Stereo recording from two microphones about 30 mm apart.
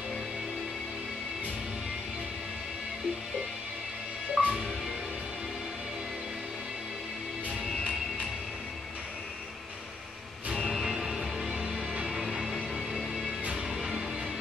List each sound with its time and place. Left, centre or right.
4.4 s music: centre
10.8 s music: centre
11.4 s music: right